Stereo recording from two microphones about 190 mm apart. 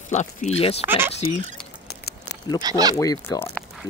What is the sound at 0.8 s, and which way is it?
Speech, 10° right (ahead or behind).